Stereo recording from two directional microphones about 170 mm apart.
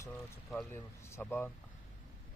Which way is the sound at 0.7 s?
15° left (ahead or behind).